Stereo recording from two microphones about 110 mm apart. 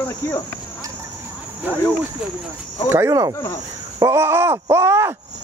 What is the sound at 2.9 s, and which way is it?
Speech, 25° right (ahead or behind).